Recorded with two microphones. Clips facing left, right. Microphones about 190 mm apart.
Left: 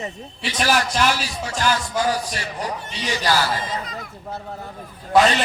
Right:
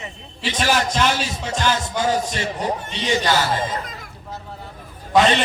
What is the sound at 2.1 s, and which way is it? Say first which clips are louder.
A man's voice: right 4 dB; 25° right (ahead or behind).